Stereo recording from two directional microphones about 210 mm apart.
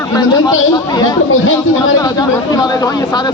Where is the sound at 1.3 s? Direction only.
70° left (ahead or behind).